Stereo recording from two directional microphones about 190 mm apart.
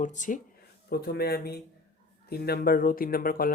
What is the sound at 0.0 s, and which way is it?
Speech, 40° left (ahead or behind).